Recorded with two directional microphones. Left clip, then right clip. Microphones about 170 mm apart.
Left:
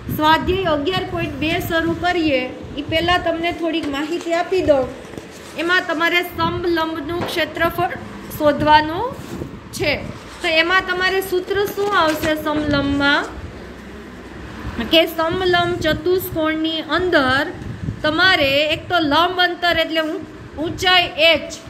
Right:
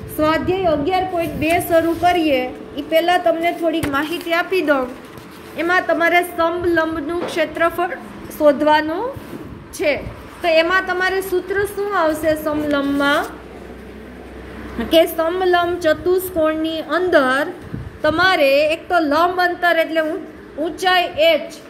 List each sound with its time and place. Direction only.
0.2 s a woman's voice: centre (ahead or behind)
1.7 s speech: 15° right (ahead or behind)
4.1 s a woman's voice: 60° right (ahead or behind)
5.6 s a woman's voice: 10° right (ahead or behind)
11.0 s a woman's voice: 20° right (ahead or behind)
11.9 s a woman's voice: centre (ahead or behind)
14.8 s a woman's voice: 5° right (ahead or behind)